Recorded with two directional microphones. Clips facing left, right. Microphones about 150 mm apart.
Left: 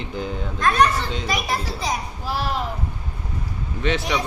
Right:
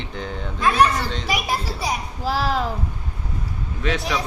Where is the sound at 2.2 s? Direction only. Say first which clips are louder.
Right 5 dB; 90° right.